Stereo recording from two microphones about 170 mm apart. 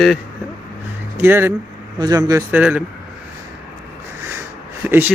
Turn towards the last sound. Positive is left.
turn(degrees=-10)  # may be behind; listen again after turning